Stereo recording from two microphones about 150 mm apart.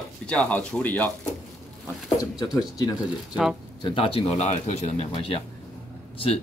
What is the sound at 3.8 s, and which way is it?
Speech, 35° left (ahead or behind).